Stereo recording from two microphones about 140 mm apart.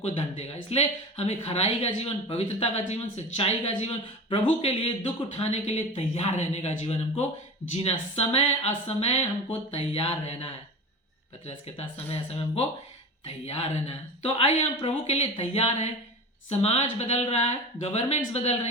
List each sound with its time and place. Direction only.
0.0 s speech: 50° left (ahead or behind)